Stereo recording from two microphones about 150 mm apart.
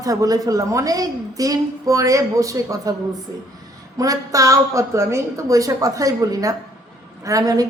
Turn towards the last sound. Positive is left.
turn(degrees=-25)  # may be behind; listen again after turning